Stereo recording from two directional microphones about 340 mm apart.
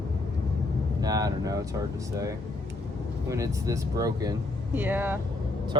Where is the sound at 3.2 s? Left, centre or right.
Centre.